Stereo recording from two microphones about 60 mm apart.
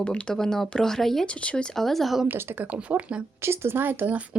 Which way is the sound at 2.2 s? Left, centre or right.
Right.